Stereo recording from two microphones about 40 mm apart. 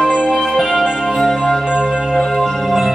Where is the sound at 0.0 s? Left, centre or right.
Centre.